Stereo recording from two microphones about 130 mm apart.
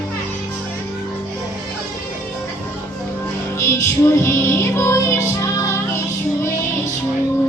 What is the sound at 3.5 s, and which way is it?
Music, 20° left (ahead or behind).